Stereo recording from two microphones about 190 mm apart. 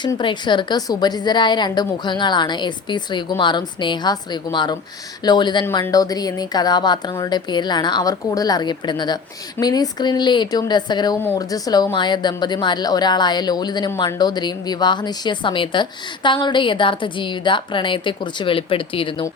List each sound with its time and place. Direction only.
0.0 s a woman's voice: 25° left (ahead or behind)